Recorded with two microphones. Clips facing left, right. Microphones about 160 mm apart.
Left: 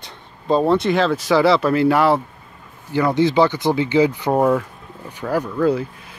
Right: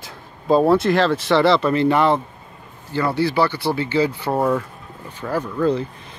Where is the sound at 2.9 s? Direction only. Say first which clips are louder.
Left 3 dB; 15° left (ahead or behind).